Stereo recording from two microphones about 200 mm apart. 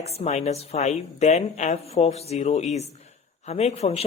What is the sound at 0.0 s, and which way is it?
Speech, 35° left (ahead or behind).